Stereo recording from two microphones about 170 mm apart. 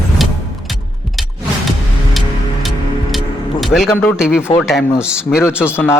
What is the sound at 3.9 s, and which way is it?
Speech, 15° left (ahead or behind).